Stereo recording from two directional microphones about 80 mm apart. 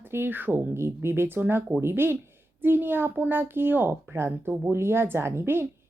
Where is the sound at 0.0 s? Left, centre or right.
Right.